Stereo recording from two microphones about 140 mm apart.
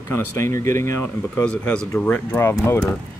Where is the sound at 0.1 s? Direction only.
15° left (ahead or behind).